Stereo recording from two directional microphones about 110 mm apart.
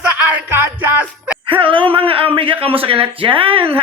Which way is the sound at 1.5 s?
50° right (ahead or behind).